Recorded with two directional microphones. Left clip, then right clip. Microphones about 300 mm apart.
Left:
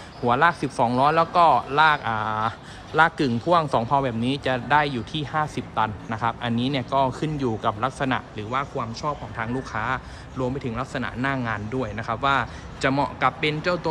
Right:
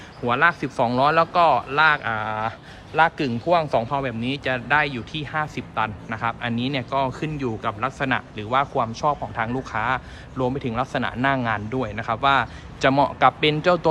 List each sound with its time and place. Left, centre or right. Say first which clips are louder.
0.3 s speech: even; centre